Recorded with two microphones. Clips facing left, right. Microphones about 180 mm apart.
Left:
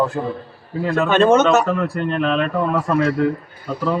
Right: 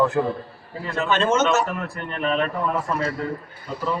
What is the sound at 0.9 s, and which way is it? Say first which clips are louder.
A man's voice: left 7 dB; 60° left (ahead or behind).